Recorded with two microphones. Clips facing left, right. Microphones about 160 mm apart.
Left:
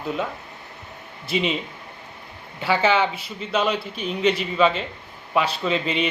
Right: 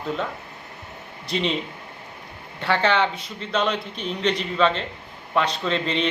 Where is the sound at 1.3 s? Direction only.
5° left (ahead or behind).